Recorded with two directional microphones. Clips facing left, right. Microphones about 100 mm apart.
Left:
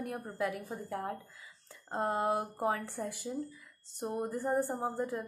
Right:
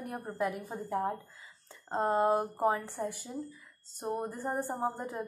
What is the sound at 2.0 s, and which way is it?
Speech, 35° right (ahead or behind).